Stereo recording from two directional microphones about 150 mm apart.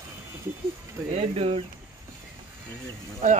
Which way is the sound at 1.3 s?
40° right (ahead or behind).